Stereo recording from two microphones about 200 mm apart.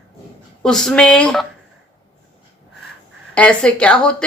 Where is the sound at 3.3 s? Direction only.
5° left (ahead or behind).